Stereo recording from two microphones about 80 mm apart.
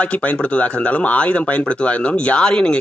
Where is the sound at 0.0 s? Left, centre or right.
Centre.